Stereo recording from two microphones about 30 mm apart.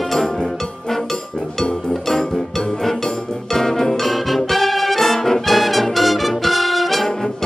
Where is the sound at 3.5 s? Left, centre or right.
Centre.